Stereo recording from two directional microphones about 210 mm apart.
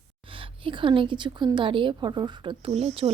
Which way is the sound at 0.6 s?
25° right (ahead or behind).